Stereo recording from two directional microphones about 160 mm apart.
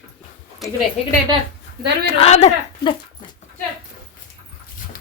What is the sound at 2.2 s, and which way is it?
Speech, 40° left (ahead or behind).